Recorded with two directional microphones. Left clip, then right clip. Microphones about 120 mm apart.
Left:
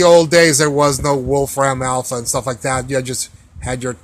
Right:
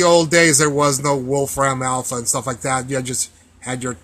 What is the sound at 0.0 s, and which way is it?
Speech, 40° left (ahead or behind).